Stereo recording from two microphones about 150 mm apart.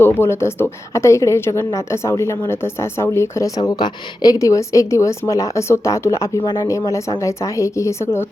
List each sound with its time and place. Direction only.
0.0 s a woman's voice: 15° left (ahead or behind)